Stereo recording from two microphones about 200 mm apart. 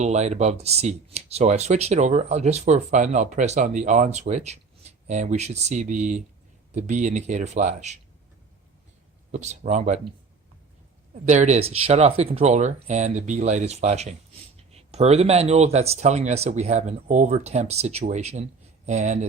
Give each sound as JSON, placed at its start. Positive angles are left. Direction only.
{"t": 0.0, "sound": "speech", "side_deg": -35}
{"t": 9.3, "sound": "speech", "side_deg": -35}
{"t": 11.1, "sound": "speech", "side_deg": -35}